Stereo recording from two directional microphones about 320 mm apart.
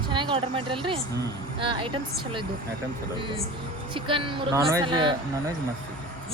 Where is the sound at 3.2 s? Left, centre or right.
Centre.